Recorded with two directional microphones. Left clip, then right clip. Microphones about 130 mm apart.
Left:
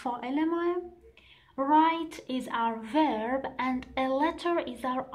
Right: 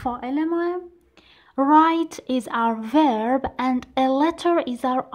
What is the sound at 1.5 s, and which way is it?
A woman's voice, 65° right (ahead or behind).